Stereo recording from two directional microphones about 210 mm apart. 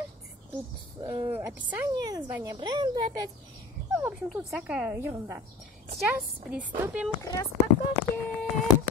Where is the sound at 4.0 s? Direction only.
5° right (ahead or behind).